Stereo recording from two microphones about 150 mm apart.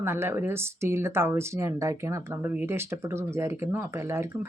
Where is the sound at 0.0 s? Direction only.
15° right (ahead or behind).